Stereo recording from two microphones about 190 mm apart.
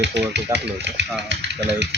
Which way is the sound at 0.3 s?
65° right (ahead or behind).